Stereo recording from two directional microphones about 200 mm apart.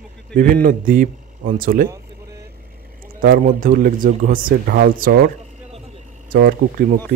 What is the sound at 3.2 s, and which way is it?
Speech, 45° right (ahead or behind).